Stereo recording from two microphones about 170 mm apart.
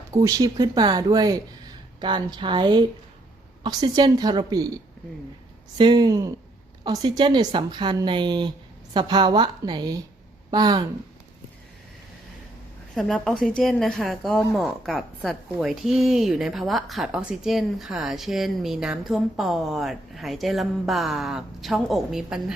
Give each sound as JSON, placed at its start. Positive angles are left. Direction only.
{"t": 0.1, "sound": "a woman's voice", "side_deg": -20}
{"t": 12.9, "sound": "a woman's voice", "side_deg": 0}